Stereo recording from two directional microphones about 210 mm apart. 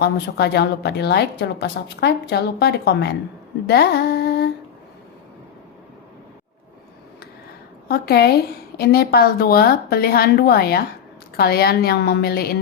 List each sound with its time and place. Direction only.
0.0 s a woman's voice: 50° left (ahead or behind)
3.7 s music: 50° left (ahead or behind)
7.9 s a woman's voice: 50° left (ahead or behind)